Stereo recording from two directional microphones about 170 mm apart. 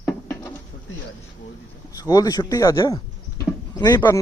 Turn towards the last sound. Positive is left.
turn(degrees=25)  # may be behind; listen again after turning